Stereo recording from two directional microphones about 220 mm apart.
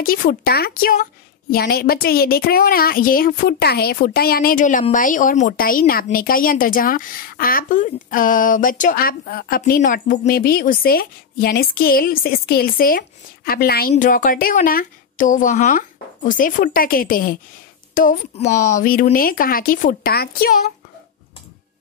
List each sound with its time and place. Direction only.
0.0 s a woman's voice: 40° left (ahead or behind)